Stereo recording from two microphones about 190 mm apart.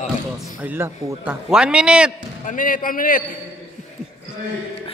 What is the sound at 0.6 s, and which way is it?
A man's voice, 10° right (ahead or behind).